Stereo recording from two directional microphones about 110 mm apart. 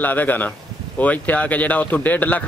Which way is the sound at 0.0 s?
15° left (ahead or behind).